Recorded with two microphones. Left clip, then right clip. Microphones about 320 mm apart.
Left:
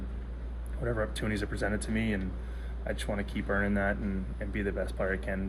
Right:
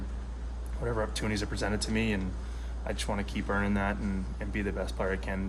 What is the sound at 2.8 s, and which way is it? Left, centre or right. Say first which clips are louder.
Speech: right 1 dB; right.